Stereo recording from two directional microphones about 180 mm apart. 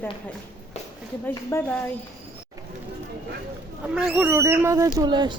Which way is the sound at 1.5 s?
15° left (ahead or behind).